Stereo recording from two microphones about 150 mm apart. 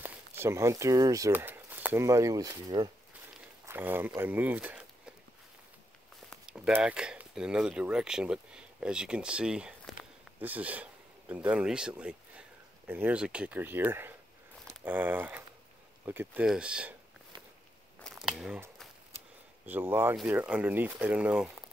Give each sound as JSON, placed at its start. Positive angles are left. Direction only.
{"t": 0.0, "sound": "speech", "side_deg": -15}
{"t": 3.6, "sound": "speech", "side_deg": -15}
{"t": 6.4, "sound": "speech", "side_deg": -5}
{"t": 18.0, "sound": "a sound", "side_deg": 0}
{"t": 19.6, "sound": "speech", "side_deg": -10}